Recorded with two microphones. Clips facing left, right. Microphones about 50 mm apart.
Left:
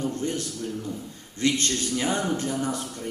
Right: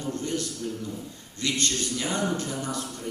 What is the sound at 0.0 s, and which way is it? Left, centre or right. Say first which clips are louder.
A man's voice: left 2 dB; left.